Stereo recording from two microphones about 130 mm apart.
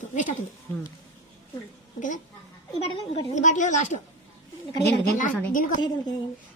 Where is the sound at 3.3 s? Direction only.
70° left (ahead or behind).